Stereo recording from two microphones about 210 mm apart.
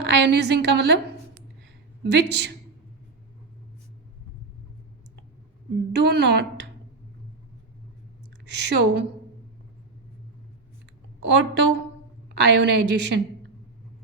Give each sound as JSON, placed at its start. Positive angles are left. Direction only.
{"t": 0.0, "sound": "a woman's voice", "side_deg": -55}
{"t": 2.0, "sound": "a woman's voice", "side_deg": -55}
{"t": 5.9, "sound": "a woman's voice", "side_deg": -55}
{"t": 8.6, "sound": "a woman's voice", "side_deg": -55}
{"t": 11.2, "sound": "a woman's voice", "side_deg": -60}